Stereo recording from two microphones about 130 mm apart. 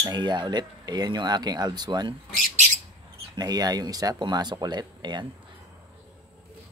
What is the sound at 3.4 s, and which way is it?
Speech, 30° right (ahead or behind).